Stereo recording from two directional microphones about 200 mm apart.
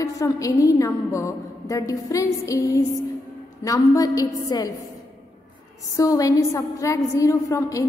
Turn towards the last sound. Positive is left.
turn(degrees=15)  # may be behind; listen again after turning